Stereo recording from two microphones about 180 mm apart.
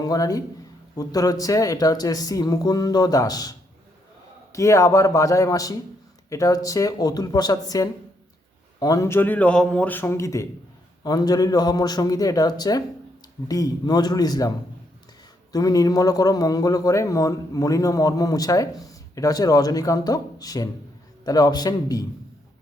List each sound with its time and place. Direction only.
0.0 s a man's voice: 20° left (ahead or behind)
4.5 s a man's voice: 15° left (ahead or behind)
15.5 s a man's voice: 20° left (ahead or behind)